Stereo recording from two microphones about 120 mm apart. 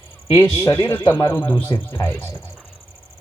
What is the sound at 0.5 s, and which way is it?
Speech, 20° left (ahead or behind).